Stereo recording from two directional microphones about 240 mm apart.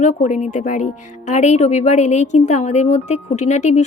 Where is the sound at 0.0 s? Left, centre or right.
Left.